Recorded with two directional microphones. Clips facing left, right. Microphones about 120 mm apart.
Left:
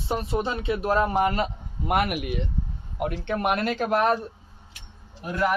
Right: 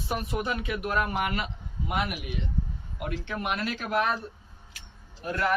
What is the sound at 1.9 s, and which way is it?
Speech, 60° left (ahead or behind).